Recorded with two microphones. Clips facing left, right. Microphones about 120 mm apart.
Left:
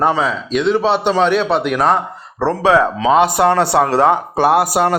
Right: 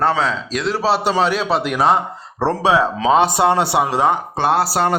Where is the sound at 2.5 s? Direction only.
20° right (ahead or behind).